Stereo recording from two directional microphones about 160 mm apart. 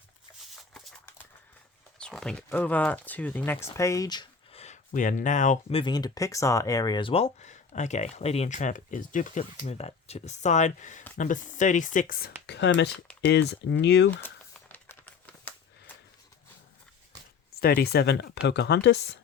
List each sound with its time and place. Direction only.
2.0 s speech: 5° left (ahead or behind); by 4.3 s 25° left (ahead or behind)
4.5 s speech: 45° left (ahead or behind)
5.6 s speech: 35° left (ahead or behind); by 12.3 s 65° left (ahead or behind)
12.5 s speech: 90° left
14.7 s a sound: 10° left (ahead or behind)
17.6 s speech: 75° left (ahead or behind); by 19.2 s 90° left